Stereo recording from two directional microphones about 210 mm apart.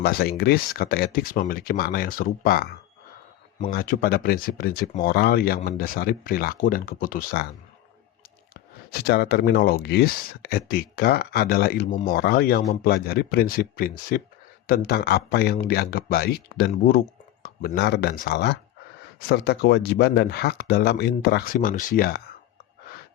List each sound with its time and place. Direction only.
0.0 s speech: 50° left (ahead or behind)
8.9 s speech: 50° left (ahead or behind)